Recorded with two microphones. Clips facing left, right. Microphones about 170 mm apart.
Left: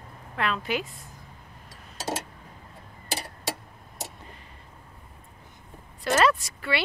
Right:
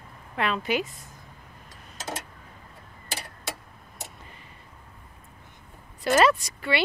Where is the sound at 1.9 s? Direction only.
25° left (ahead or behind).